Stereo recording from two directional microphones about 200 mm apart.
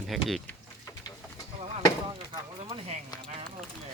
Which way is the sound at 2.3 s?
25° right (ahead or behind).